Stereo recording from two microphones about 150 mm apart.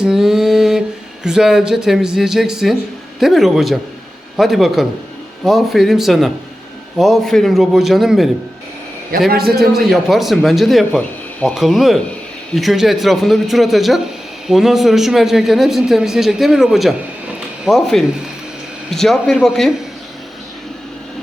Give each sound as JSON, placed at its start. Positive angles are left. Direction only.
{"t": 0.0, "sound": "mantra", "side_deg": -5}
{"t": 1.2, "sound": "a man's voice", "side_deg": -5}
{"t": 9.1, "sound": "a man's voice", "side_deg": -70}
{"t": 9.6, "sound": "a man's voice", "side_deg": 0}